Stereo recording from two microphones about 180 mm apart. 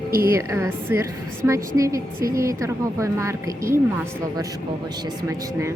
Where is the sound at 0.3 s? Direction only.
15° right (ahead or behind).